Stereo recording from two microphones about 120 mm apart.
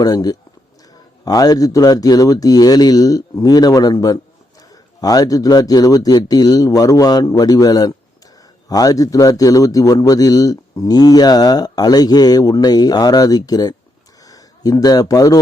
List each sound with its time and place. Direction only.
0.0 s a man's voice: 30° left (ahead or behind)